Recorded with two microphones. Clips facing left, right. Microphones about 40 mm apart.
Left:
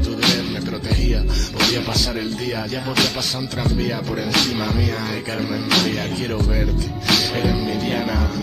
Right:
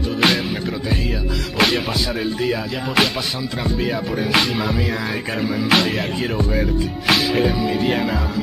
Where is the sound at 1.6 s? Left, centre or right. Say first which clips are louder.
Right 2 dB; right.